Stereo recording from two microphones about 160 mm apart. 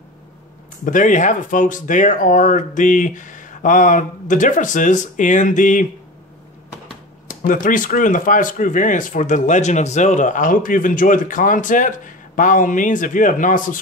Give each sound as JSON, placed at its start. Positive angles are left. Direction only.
{"t": 0.8, "sound": "speech", "side_deg": 55}
{"t": 7.2, "sound": "speech", "side_deg": 60}